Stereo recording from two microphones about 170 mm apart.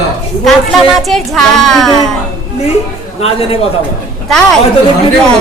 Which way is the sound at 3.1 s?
35° left (ahead or behind).